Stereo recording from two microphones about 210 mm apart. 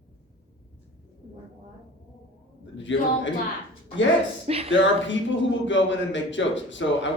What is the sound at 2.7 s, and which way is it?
Speech, 60° left (ahead or behind).